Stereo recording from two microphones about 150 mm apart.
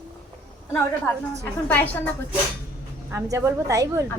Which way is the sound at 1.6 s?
10° left (ahead or behind).